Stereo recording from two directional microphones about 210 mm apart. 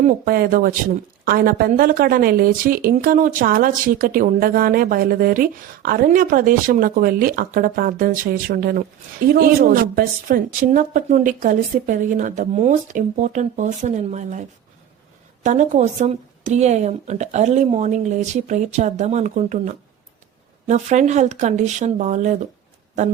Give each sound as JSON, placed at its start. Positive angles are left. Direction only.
{"t": 0.0, "sound": "a woman's voice", "side_deg": -45}
{"t": 15.4, "sound": "a woman's voice", "side_deg": -35}